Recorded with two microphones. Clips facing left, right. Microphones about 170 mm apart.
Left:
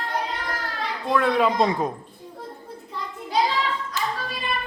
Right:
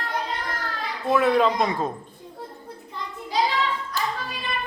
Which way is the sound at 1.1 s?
5° right (ahead or behind).